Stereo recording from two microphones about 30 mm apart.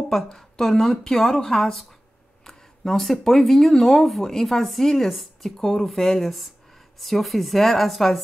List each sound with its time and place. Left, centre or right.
0.1 s speech: centre
2.4 s a sound: centre
3.0 s speech: centre
5.6 s speech: centre